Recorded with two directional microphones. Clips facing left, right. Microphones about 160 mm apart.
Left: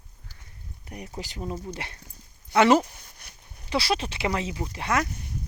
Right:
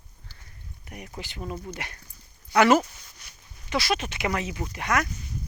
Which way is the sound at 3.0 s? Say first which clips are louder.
Left 1 dB; 55° left (ahead or behind).